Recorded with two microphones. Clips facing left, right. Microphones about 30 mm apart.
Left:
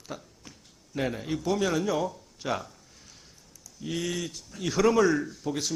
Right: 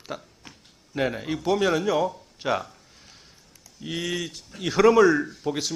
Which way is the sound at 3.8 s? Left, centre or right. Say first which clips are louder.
Right 2 dB; right.